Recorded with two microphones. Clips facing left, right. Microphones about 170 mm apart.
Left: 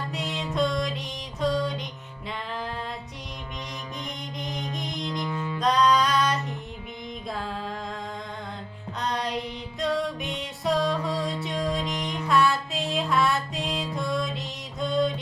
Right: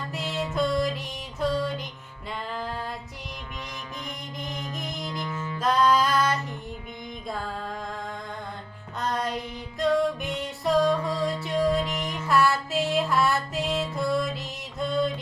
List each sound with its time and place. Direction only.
0.1 s music: centre (ahead or behind)
4.0 s music: centre (ahead or behind)
5.2 s music: 15° left (ahead or behind)
5.5 s music: 5° right (ahead or behind)
9.0 s child singing: centre (ahead or behind)
9.8 s music: centre (ahead or behind)